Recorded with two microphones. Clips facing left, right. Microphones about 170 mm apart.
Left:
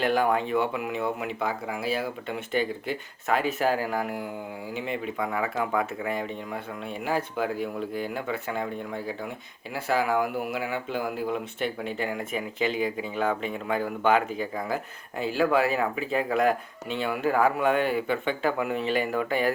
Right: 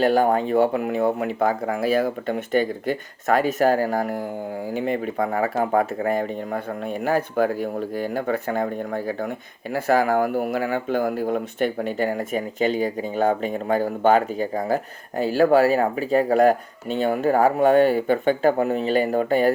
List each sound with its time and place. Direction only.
0.0 s speech: 40° right (ahead or behind)